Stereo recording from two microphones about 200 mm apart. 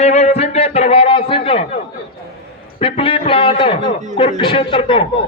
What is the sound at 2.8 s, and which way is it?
A man's voice, 30° left (ahead or behind).